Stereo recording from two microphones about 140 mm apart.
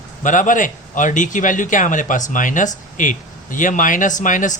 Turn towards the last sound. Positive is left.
turn(degrees=65)  # may be behind; listen again after turning